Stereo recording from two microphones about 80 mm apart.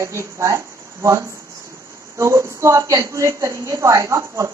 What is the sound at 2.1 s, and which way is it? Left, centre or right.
A woman's voice, right.